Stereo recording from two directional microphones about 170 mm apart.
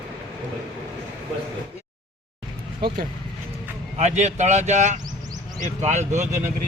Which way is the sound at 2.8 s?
65° right (ahead or behind).